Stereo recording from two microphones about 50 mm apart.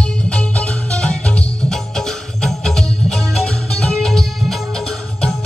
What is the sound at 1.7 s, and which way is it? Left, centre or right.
Music, centre.